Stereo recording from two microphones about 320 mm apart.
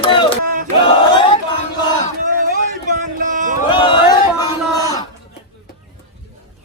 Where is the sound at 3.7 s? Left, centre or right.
Centre.